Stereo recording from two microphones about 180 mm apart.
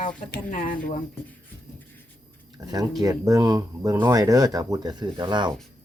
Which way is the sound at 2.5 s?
20° right (ahead or behind).